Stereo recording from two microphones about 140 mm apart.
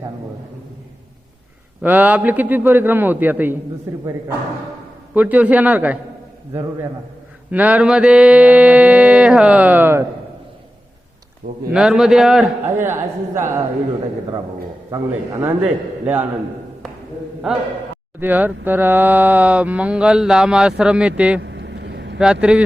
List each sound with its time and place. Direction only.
1.8 s speech: 10° right (ahead or behind)
5.1 s speech: 10° right (ahead or behind)
7.5 s speech: 10° right (ahead or behind)
11.7 s a man's voice: 5° right (ahead or behind)
12.6 s speech: 15° right (ahead or behind)
14.8 s a man's voice: 20° right (ahead or behind)
17.5 s a man's voice: 5° right (ahead or behind)